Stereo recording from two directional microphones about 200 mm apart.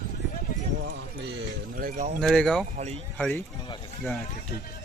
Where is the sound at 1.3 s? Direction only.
45° right (ahead or behind).